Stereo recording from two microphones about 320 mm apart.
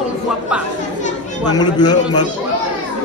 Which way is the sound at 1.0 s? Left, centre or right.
Left.